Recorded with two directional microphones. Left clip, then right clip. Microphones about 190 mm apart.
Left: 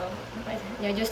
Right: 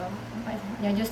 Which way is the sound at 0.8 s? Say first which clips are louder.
Left 1 dB; 20° right (ahead or behind).